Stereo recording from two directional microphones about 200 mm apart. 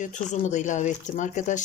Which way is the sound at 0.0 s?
35° left (ahead or behind).